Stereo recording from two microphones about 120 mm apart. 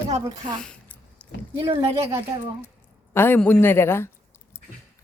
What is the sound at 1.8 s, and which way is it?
Speech, 25° right (ahead or behind).